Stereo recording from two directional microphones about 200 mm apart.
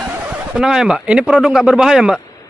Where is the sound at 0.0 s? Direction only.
5° right (ahead or behind).